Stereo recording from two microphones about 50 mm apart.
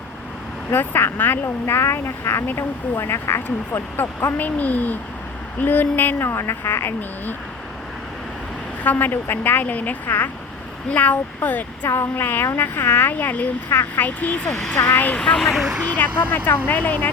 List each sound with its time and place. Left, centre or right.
0.7 s speech: left
1.6 s speech: left
3.7 s a woman's voice: left
6.2 s speech: left
8.8 s a woman's voice: left
13.7 s a woman's voice: left
14.8 s speech: left
15.2 s speech: centre
15.4 s speech: centre
16.0 s a woman's voice: left